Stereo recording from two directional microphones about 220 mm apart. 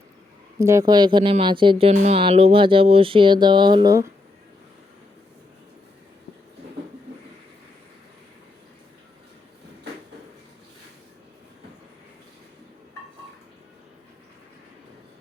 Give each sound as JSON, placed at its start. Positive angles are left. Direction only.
{"t": 0.6, "sound": "speech", "side_deg": -15}